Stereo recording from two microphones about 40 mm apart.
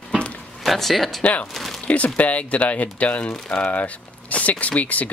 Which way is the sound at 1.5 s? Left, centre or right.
Centre.